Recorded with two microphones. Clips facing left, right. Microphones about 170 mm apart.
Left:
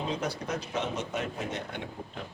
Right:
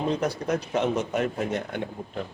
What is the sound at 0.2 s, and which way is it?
Speech, 60° right (ahead or behind).